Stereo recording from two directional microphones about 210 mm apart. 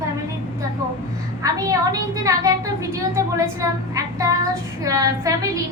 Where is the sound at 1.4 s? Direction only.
15° right (ahead or behind).